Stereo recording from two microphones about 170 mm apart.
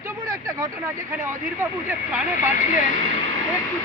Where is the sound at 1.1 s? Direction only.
15° right (ahead or behind).